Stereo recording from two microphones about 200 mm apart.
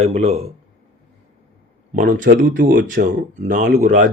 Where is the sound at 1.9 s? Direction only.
40° right (ahead or behind).